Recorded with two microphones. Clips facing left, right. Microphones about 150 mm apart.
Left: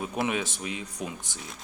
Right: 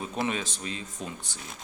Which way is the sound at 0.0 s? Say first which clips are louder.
Left 2 dB; 10° left (ahead or behind).